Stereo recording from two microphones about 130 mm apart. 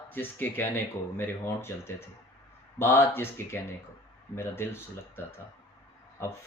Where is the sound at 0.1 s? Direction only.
15° left (ahead or behind).